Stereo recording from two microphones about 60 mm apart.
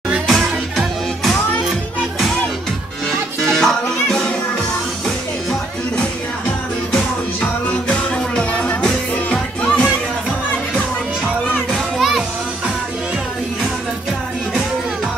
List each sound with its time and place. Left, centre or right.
0.3 s music: centre
3.4 s music: centre
7.6 s music: left
11.7 s music: centre